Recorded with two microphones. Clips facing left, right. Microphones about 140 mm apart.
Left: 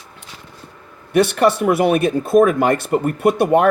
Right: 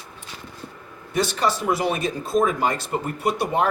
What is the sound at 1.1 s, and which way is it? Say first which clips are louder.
Speech: left 8 dB; 60° left (ahead or behind).